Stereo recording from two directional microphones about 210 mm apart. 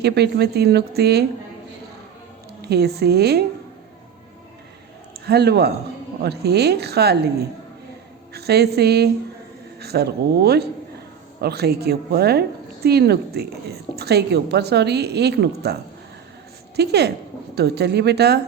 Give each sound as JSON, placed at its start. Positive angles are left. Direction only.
{"t": 0.0, "sound": "a woman's voice", "side_deg": -50}
{"t": 2.6, "sound": "a woman's voice", "side_deg": -50}
{"t": 5.2, "sound": "a woman's voice", "side_deg": -50}
{"t": 8.3, "sound": "a woman's voice", "side_deg": -50}